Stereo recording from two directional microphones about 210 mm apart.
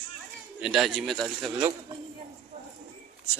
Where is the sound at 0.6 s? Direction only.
Centre (ahead or behind).